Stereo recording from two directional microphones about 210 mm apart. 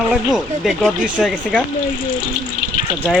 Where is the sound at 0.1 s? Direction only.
5° right (ahead or behind).